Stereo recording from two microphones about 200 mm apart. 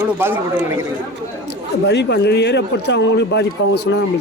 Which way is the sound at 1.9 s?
55° left (ahead or behind).